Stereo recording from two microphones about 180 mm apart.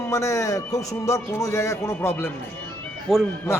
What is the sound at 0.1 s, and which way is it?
A man's voice, 15° left (ahead or behind).